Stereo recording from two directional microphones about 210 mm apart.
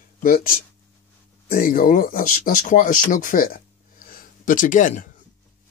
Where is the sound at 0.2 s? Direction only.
45° left (ahead or behind).